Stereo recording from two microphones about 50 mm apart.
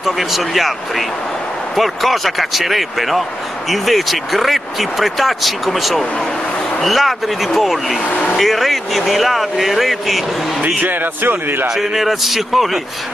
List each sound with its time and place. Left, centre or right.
0.0 s speech: centre
10.6 s a man's voice: right
11.6 s a man's voice: centre